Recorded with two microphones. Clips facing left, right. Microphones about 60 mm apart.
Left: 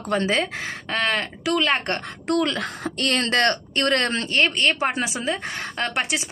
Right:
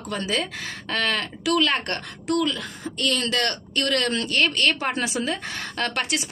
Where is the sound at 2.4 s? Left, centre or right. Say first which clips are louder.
Left 2 dB; left.